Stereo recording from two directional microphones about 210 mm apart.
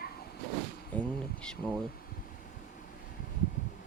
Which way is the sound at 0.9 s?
5° left (ahead or behind).